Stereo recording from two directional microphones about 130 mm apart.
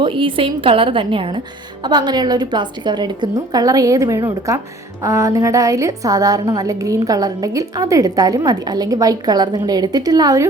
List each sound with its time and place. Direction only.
0.0 s a woman's voice: 40° right (ahead or behind)